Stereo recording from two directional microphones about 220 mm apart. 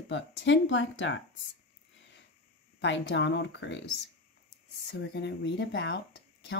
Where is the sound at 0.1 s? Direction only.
55° left (ahead or behind).